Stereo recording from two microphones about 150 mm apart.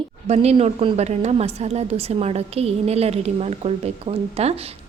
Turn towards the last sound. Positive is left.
turn(degrees=-45)  # may be behind; listen again after turning